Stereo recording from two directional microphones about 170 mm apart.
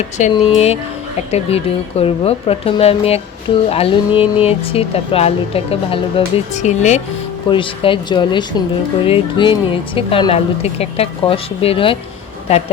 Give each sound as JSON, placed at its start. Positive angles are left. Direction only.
{"t": 0.2, "sound": "speech", "side_deg": 35}
{"t": 7.5, "sound": "speech", "side_deg": 30}